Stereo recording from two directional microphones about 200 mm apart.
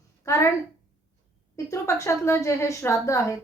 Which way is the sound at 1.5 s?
15° left (ahead or behind).